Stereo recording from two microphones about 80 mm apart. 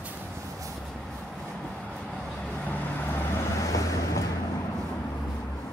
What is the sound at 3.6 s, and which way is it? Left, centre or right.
Vehicle, left.